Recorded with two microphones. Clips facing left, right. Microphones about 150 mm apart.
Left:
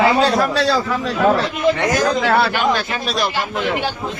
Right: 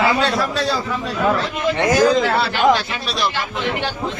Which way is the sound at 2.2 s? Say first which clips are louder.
Even; 55° left (ahead or behind).